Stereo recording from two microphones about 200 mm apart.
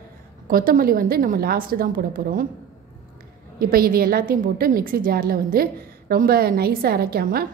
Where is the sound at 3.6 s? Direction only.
45° right (ahead or behind).